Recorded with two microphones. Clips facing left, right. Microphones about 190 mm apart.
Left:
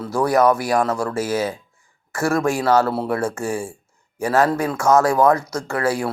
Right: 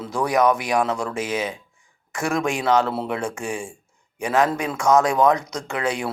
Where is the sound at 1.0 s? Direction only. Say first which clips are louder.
Left 4 dB; 15° right (ahead or behind).